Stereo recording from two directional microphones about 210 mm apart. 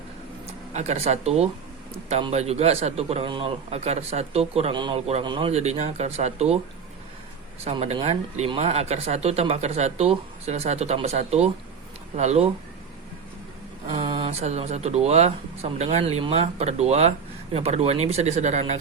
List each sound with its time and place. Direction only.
0.7 s a man's voice: 30° right (ahead or behind)
7.6 s a man's voice: 30° right (ahead or behind)
14.0 s a man's voice: 25° right (ahead or behind)